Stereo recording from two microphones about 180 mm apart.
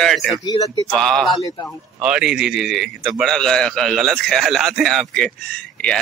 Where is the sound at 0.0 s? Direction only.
Centre (ahead or behind).